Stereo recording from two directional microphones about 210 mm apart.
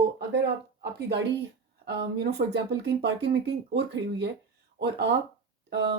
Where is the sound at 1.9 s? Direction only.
55° right (ahead or behind).